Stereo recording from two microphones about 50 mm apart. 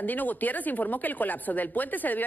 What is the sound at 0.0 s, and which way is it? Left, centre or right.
A woman's voice, left.